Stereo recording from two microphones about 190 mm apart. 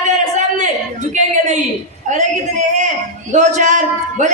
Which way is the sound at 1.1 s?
40° right (ahead or behind).